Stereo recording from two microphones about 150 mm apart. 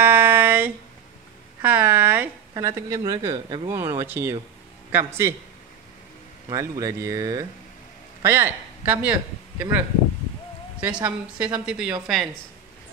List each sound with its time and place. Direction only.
0.0 s a sound: 15° right (ahead or behind)
2.5 s a woman's voice: 20° right (ahead or behind)
6.5 s a woman's voice: 20° right (ahead or behind)